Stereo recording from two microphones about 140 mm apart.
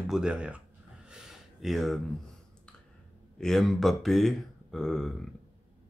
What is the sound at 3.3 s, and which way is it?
Speech, 5° left (ahead or behind).